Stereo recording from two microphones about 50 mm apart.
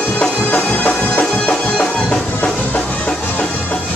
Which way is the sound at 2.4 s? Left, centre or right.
Left.